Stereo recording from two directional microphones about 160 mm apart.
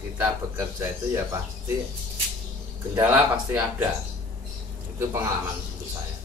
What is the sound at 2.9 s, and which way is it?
Speech, 15° right (ahead or behind).